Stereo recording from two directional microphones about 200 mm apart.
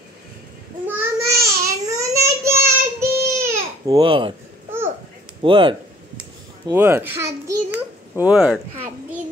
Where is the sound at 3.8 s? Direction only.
20° right (ahead or behind).